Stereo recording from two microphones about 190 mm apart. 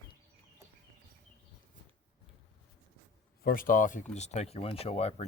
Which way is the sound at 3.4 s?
50° left (ahead or behind).